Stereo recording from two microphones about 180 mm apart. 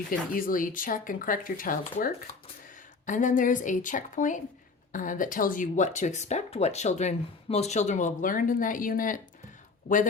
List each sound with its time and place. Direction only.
0.1 s speech: 50° left (ahead or behind)
3.1 s speech: 45° left (ahead or behind)